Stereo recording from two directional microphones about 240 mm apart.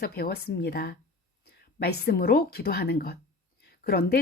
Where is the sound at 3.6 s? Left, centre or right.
Left.